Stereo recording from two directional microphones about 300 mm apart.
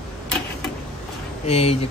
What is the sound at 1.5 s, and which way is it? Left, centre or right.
Speech, centre.